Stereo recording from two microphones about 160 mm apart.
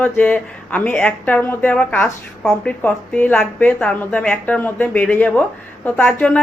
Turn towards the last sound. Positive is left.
turn(degrees=5)  # may be behind; listen again after turning